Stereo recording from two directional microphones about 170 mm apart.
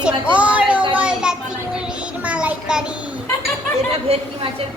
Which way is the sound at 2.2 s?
5° right (ahead or behind).